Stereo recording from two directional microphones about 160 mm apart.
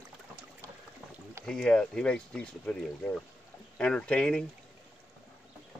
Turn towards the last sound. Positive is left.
turn(degrees=5)  # may be behind; listen again after turning